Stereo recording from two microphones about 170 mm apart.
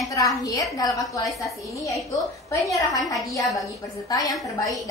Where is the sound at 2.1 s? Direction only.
20° left (ahead or behind).